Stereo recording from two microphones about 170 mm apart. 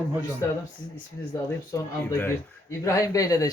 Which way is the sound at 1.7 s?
15° left (ahead or behind).